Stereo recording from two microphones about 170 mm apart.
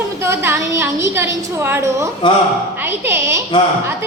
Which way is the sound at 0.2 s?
15° right (ahead or behind).